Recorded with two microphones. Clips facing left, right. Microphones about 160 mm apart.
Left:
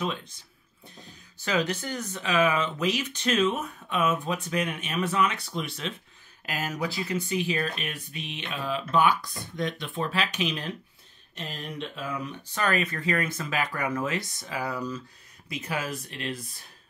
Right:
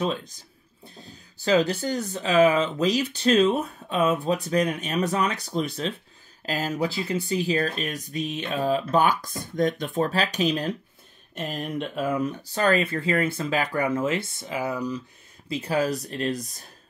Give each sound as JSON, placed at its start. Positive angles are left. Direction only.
{"t": 0.0, "sound": "speech", "side_deg": -40}
{"t": 15.4, "sound": "speech", "side_deg": -30}